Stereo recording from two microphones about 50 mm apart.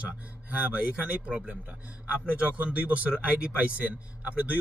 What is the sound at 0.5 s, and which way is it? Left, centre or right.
Speech, right.